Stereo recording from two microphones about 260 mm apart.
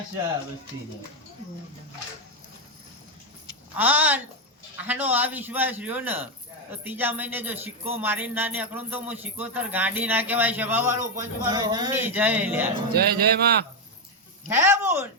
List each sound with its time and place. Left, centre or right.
3.8 s speech: centre
12.9 s speech: right
14.5 s speech: centre